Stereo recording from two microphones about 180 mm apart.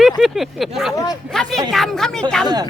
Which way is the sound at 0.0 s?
Centre (ahead or behind).